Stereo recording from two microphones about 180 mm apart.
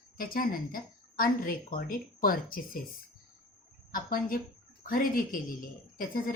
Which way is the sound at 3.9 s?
50° left (ahead or behind).